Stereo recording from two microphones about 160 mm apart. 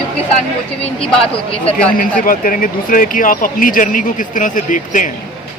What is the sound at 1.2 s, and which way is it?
Speech, 35° left (ahead or behind).